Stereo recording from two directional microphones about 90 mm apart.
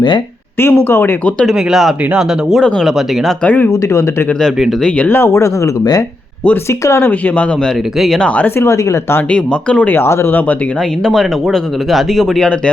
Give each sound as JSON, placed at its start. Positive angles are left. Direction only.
{"t": 0.6, "sound": "speech", "side_deg": 25}
{"t": 1.5, "sound": "speech", "side_deg": -5}
{"t": 3.4, "sound": "speech", "side_deg": 20}
{"t": 5.0, "sound": "speech", "side_deg": 25}
{"t": 6.7, "sound": "speech", "side_deg": 30}
{"t": 7.9, "sound": "speech", "side_deg": 0}
{"t": 8.5, "sound": "speech", "side_deg": 35}
{"t": 9.3, "sound": "speech", "side_deg": 10}
{"t": 11.0, "sound": "speech", "side_deg": 5}